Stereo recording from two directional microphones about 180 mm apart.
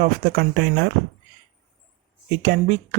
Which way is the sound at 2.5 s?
65° right (ahead or behind).